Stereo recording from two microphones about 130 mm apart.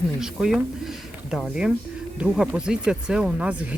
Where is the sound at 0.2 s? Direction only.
5° right (ahead or behind).